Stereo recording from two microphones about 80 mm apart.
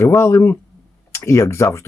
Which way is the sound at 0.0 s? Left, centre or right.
Left.